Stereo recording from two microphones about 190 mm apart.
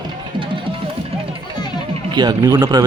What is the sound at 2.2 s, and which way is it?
Speech, 20° right (ahead or behind).